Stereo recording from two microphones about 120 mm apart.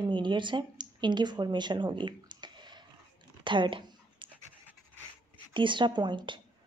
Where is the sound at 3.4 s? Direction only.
40° right (ahead or behind).